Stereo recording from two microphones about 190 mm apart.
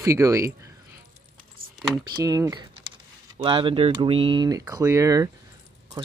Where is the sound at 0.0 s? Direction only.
15° right (ahead or behind).